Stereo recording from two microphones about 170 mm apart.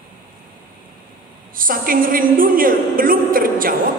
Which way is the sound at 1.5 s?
55° right (ahead or behind).